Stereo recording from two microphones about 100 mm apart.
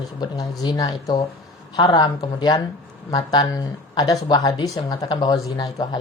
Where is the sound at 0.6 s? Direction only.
40° left (ahead or behind).